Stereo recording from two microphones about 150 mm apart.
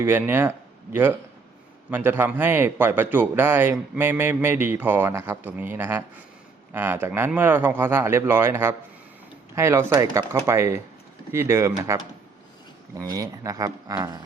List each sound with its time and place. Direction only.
0.0 s a man's voice: 15° right (ahead or behind)
1.9 s a man's voice: 15° right (ahead or behind)
13.0 s speech: 25° right (ahead or behind)